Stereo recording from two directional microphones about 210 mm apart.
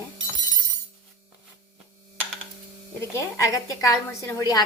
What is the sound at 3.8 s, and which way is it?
Speech, 15° left (ahead or behind).